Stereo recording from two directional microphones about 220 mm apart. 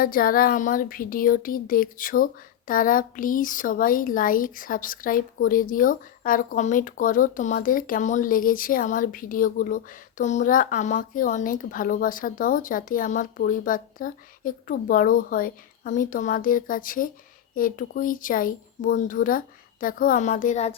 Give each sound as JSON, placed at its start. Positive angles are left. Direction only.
{"t": 0.0, "sound": "speech", "side_deg": 40}